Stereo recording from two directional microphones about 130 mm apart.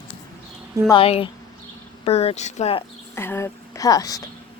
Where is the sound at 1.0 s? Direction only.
45° left (ahead or behind).